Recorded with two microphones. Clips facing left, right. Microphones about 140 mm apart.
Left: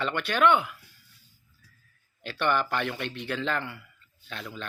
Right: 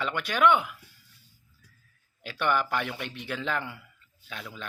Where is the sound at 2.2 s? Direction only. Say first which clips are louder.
Left 1 dB; 10° right (ahead or behind).